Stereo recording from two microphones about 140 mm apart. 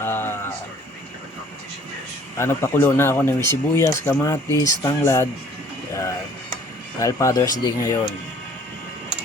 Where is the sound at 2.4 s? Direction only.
15° left (ahead or behind).